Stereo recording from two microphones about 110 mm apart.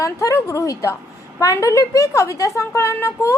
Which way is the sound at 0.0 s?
30° left (ahead or behind).